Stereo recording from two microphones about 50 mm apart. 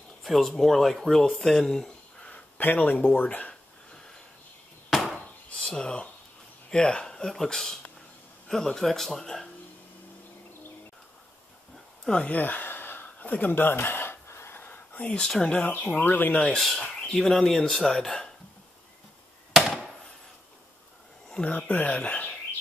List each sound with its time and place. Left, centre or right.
0.2 s speech: centre
2.2 s a sound: left
2.6 s speech: left
4.8 s a sound: centre
5.7 s speech: centre
12.0 s speech: centre
12.3 s speech: left
13.8 s a sound: left
14.2 s a sound: left
14.6 s whispering: left
15.1 s speech: centre
15.8 s speech: left
16.4 s speech: centre
21.7 s speech: left